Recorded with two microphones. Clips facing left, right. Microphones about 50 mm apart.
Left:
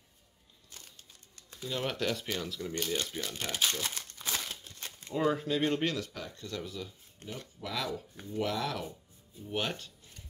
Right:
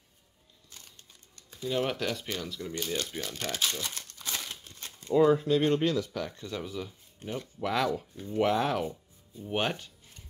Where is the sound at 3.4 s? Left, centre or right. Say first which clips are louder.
Even; centre.